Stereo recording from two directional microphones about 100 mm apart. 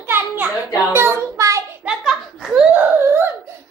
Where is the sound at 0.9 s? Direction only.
30° right (ahead or behind).